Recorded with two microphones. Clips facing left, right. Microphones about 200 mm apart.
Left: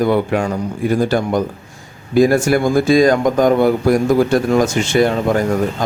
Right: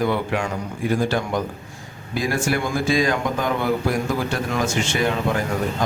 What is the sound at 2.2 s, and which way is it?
Speech, 45° left (ahead or behind).